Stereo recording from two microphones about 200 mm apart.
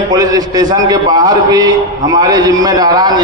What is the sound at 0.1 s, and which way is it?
A man's voice, 20° right (ahead or behind).